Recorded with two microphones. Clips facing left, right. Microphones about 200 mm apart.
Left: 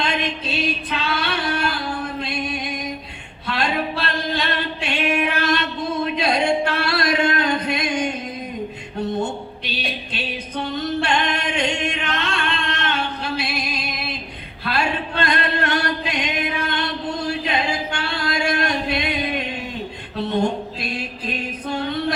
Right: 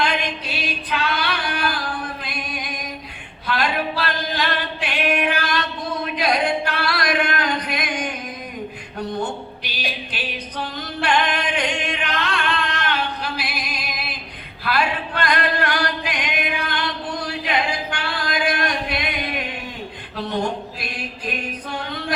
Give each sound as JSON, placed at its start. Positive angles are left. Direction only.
{"t": 0.0, "sound": "music", "side_deg": 25}
{"t": 3.4, "sound": "singing", "side_deg": 25}
{"t": 6.1, "sound": "music", "side_deg": 25}
{"t": 10.8, "sound": "singing", "side_deg": 25}
{"t": 20.1, "sound": "a sound", "side_deg": 25}